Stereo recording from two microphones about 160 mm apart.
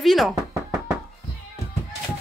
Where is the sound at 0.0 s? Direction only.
Centre (ahead or behind).